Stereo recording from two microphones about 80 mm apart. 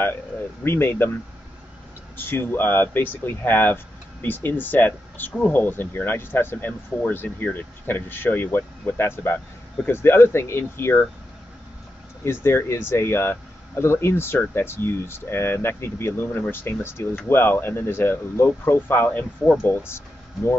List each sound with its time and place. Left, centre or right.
0.7 s speech: left
2.1 s speech: left
12.3 s speech: left